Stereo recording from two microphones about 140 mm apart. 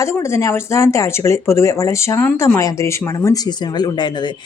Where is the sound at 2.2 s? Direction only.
10° left (ahead or behind).